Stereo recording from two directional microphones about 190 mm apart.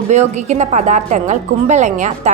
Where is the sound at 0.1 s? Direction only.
35° right (ahead or behind).